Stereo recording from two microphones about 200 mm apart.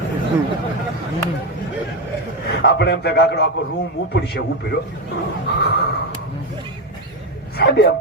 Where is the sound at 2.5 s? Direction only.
55° left (ahead or behind).